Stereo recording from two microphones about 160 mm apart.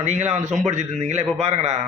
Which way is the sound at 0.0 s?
45° right (ahead or behind).